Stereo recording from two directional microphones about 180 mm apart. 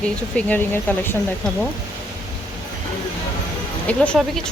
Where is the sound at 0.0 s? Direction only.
5° left (ahead or behind).